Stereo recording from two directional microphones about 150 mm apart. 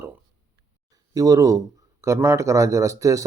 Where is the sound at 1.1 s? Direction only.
25° right (ahead or behind).